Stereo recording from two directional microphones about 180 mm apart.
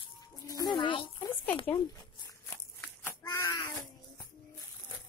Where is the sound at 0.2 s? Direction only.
20° left (ahead or behind).